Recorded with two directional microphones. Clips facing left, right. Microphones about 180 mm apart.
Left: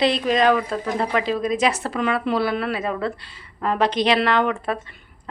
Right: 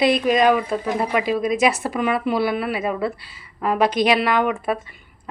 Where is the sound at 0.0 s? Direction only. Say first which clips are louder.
Right 2 dB; 10° right (ahead or behind).